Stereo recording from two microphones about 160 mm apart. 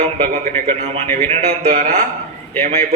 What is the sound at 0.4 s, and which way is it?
A man's voice, 45° right (ahead or behind).